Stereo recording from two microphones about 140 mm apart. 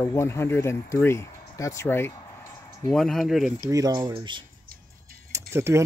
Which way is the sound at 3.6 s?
25° right (ahead or behind).